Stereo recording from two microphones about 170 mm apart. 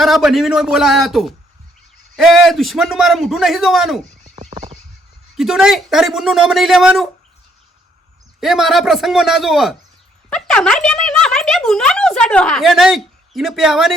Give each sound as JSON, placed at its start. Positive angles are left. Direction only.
{"t": 0.0, "sound": "a man's voice", "side_deg": 0}
{"t": 4.2, "sound": "a sound", "side_deg": -40}
{"t": 5.4, "sound": "a man's voice", "side_deg": 0}
{"t": 8.4, "sound": "a man's voice", "side_deg": 0}
{"t": 10.2, "sound": "a sound", "side_deg": 5}
{"t": 10.8, "sound": "a woman's voice", "side_deg": 5}